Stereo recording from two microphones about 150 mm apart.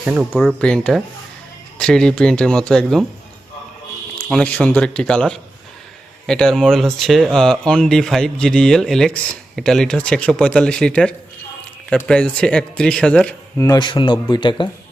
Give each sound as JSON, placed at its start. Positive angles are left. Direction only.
{"t": 0.0, "sound": "speech", "side_deg": -10}
{"t": 0.3, "sound": "speech", "side_deg": 5}
{"t": 4.3, "sound": "speech", "side_deg": 5}
{"t": 13.6, "sound": "speech", "side_deg": 25}